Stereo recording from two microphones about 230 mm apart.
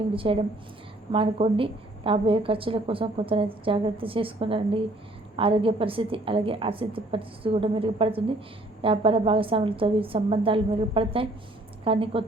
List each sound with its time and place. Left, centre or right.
0.1 s a woman's voice: right